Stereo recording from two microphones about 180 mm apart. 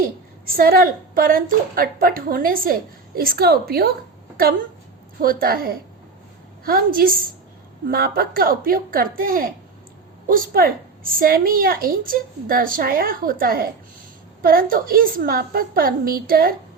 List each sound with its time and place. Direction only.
0.0 s a woman's voice: 55° right (ahead or behind)
5.2 s a woman's voice: 55° right (ahead or behind)